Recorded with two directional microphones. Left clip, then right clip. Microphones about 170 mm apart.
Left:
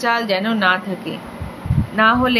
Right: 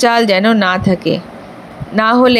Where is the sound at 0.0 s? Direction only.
45° right (ahead or behind).